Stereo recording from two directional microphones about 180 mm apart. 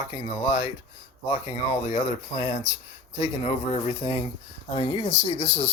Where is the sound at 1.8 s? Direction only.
35° left (ahead or behind).